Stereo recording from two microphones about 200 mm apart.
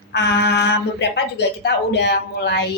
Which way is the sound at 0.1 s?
55° left (ahead or behind).